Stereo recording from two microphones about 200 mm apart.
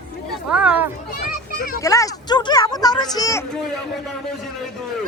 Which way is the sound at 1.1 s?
45° left (ahead or behind).